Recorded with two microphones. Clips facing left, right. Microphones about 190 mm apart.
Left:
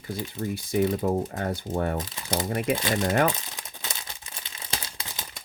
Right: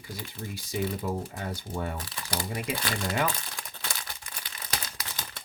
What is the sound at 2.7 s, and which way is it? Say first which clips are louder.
Speech: left 6 dB; 20° left (ahead or behind).